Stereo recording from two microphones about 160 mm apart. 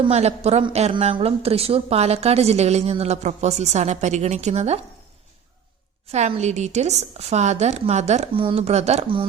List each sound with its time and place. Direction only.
0.0 s a woman's voice: 40° right (ahead or behind)
6.1 s a woman's voice: 40° right (ahead or behind)